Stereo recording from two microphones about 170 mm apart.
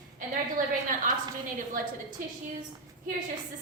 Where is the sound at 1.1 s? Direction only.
50° right (ahead or behind).